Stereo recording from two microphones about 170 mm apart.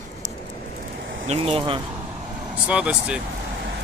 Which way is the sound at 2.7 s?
5° right (ahead or behind).